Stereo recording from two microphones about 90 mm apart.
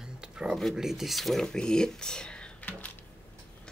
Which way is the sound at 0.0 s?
10° right (ahead or behind).